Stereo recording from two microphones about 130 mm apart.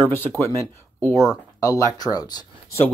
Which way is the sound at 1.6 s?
25° left (ahead or behind).